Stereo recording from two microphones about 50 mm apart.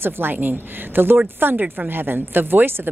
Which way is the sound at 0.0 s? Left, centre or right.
Right.